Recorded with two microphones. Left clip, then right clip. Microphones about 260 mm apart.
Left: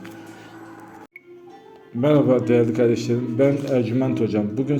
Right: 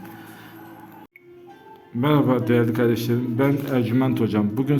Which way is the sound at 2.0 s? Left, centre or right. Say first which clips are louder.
Left 3 dB; centre.